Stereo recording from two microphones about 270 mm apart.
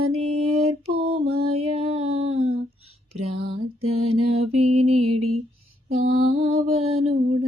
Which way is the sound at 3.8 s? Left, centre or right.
Right.